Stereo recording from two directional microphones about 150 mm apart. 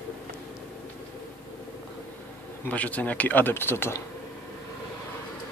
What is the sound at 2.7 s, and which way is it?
A man's voice, 10° left (ahead or behind).